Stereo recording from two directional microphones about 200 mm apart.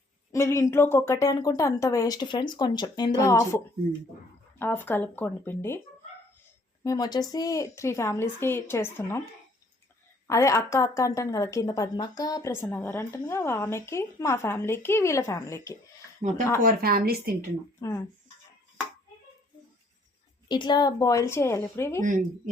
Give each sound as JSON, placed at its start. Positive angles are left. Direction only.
{"t": 0.3, "sound": "speech", "side_deg": 15}
{"t": 6.8, "sound": "speech", "side_deg": 20}
{"t": 10.2, "sound": "speech", "side_deg": 15}
{"t": 16.6, "sound": "a woman's voice", "side_deg": -45}
{"t": 17.7, "sound": "speech", "side_deg": 10}
{"t": 20.5, "sound": "speech", "side_deg": 20}